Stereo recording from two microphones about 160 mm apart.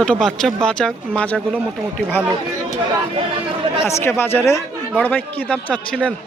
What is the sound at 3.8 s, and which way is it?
A man's voice, 15° left (ahead or behind).